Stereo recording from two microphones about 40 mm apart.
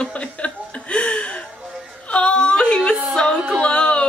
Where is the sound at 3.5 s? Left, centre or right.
Left.